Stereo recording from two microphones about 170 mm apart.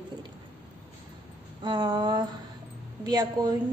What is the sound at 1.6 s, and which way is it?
A woman's voice, 25° right (ahead or behind).